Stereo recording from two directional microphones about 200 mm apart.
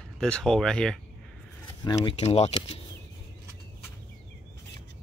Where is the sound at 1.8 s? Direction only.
30° left (ahead or behind).